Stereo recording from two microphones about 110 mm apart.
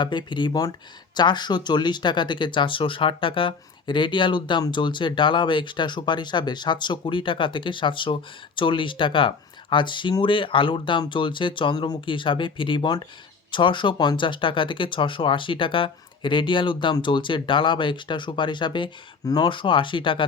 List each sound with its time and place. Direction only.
0.0 s speech: 45° left (ahead or behind)